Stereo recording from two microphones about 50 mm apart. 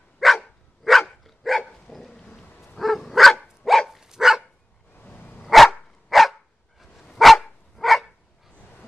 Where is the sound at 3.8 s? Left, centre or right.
Centre.